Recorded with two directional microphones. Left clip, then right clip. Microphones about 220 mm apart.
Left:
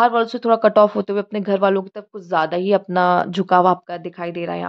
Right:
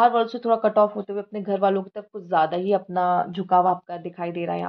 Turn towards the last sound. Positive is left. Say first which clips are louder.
# left 2 dB
turn(degrees=25)  # may be behind; listen again after turning